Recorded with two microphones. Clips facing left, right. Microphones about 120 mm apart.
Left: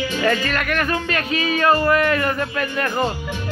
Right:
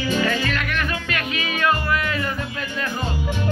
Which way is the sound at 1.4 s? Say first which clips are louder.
Left 5 dB; 35° left (ahead or behind).